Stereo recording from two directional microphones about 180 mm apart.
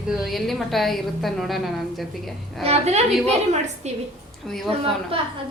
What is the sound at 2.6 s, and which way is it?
A woman's voice, 35° right (ahead or behind).